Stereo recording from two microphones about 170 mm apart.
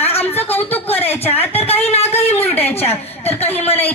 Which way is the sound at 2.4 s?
10° left (ahead or behind).